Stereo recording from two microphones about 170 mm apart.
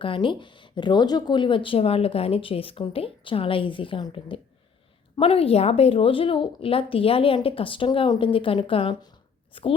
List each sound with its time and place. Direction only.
0.0 s speech: 30° left (ahead or behind)